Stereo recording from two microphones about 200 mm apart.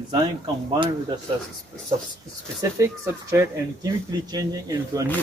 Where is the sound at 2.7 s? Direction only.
15° right (ahead or behind).